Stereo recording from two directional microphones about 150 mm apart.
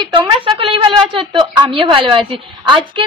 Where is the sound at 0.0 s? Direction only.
35° right (ahead or behind).